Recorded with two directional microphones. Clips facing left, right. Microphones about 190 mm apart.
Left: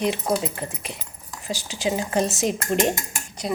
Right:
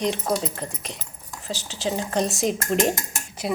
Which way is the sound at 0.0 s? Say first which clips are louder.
Left 1 dB; 5° left (ahead or behind).